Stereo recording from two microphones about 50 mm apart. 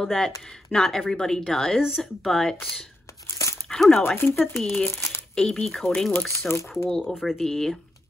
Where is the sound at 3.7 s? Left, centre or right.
Centre.